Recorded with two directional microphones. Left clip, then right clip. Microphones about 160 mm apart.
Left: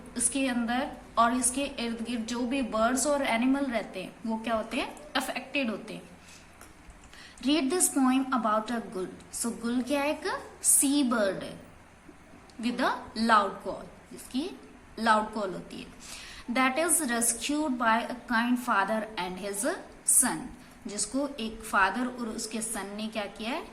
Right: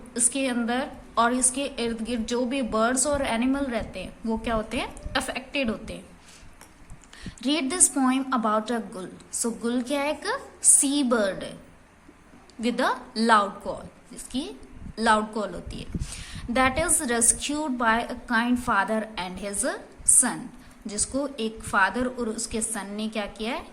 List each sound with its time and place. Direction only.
0.1 s a woman's voice: 35° right (ahead or behind)
7.4 s a woman's voice: 35° right (ahead or behind)
12.6 s a woman's voice: 35° right (ahead or behind)
20.8 s a woman's voice: 30° right (ahead or behind)